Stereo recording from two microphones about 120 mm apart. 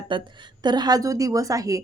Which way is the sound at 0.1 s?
45° right (ahead or behind).